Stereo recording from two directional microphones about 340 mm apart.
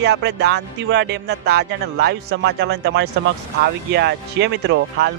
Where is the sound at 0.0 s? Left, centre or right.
Right.